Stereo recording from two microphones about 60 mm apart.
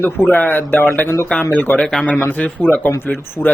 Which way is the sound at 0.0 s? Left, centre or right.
Left.